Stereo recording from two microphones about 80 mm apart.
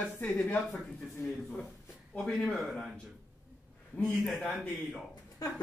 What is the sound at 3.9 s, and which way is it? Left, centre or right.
Speech, centre.